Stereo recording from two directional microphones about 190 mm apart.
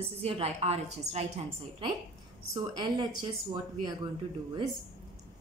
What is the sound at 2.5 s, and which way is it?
Speech, 20° right (ahead or behind).